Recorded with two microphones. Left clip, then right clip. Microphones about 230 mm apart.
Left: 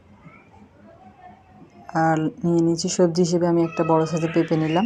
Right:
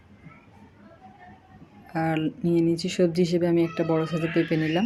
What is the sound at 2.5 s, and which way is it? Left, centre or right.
Speech, centre.